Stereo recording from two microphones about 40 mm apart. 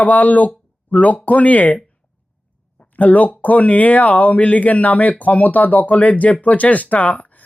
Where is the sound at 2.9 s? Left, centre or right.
Left.